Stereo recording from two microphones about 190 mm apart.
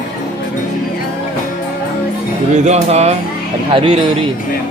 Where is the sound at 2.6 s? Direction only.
35° right (ahead or behind).